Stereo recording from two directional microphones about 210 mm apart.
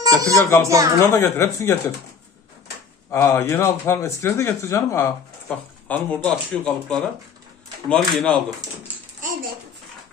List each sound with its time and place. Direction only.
0.0 s a child's voice: 15° right (ahead or behind)
1.0 s speech: 15° left (ahead or behind)
3.1 s speech: 10° left (ahead or behind)
8.5 s speech: 15° right (ahead or behind)